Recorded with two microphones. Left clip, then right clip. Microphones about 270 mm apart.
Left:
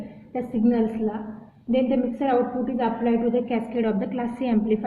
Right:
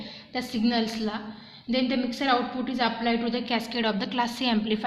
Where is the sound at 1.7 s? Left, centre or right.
Right.